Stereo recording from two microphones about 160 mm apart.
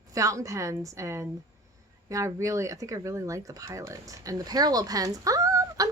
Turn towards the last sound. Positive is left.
turn(degrees=-20)  # may be behind; listen again after turning